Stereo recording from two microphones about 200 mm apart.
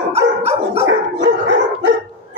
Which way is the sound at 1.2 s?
60° right (ahead or behind).